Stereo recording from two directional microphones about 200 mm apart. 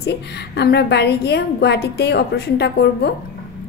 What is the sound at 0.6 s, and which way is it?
A woman's voice, 55° left (ahead or behind).